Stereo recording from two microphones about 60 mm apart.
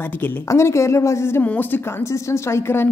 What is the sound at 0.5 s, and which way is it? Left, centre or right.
Speech, left.